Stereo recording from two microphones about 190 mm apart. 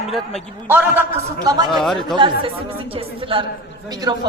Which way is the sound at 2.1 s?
25° right (ahead or behind).